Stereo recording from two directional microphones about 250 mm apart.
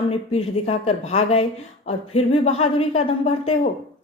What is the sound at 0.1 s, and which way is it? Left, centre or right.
Speech, left.